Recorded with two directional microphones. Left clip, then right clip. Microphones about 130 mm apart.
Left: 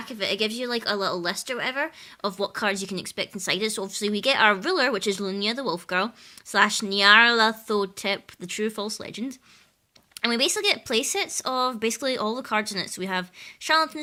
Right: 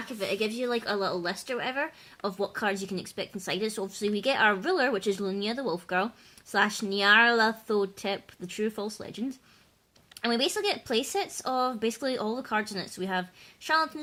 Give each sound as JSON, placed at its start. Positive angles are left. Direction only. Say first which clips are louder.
{"t": 0.2, "sound": "speech", "louder": "left 4 dB", "side_deg": 15}